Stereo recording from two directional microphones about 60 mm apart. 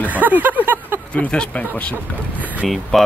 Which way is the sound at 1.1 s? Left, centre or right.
Centre.